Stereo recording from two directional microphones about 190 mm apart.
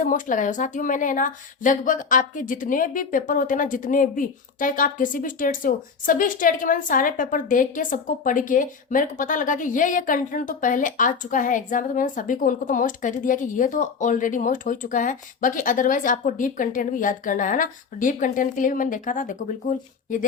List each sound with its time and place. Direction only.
0.0 s a woman's voice: 45° left (ahead or behind)